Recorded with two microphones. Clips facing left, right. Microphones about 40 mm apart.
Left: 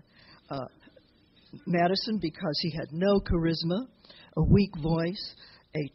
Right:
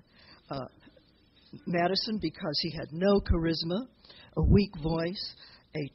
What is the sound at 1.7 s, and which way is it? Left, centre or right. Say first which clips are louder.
Speech: left 3 dB; left.